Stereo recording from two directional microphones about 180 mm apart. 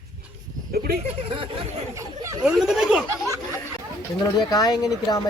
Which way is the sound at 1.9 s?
15° right (ahead or behind).